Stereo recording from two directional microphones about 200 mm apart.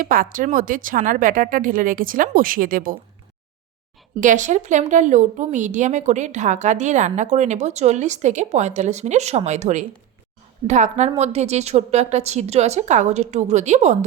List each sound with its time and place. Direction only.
0.0 s speech: 45° right (ahead or behind)
4.2 s a woman's voice: 40° right (ahead or behind)